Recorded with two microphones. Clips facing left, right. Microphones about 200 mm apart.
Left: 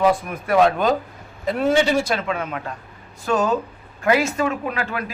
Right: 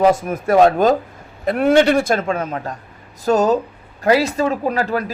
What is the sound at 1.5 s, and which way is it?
A man's voice, 60° right (ahead or behind).